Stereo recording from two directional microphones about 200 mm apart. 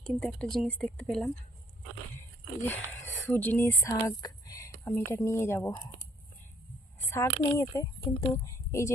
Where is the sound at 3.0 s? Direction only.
10° left (ahead or behind).